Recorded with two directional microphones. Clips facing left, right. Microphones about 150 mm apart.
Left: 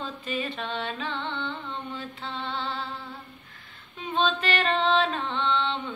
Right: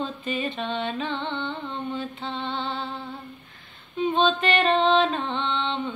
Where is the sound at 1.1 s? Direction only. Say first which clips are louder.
Right 3 dB; 30° right (ahead or behind).